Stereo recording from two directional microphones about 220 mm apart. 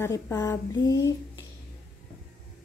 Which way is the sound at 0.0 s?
15° left (ahead or behind).